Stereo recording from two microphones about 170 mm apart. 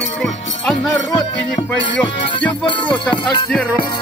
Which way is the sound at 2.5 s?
30° left (ahead or behind).